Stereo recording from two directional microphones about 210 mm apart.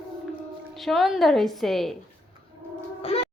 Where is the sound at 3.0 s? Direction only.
25° left (ahead or behind).